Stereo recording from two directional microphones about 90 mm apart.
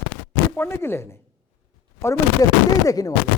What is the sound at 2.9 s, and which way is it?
Speech, 40° left (ahead or behind).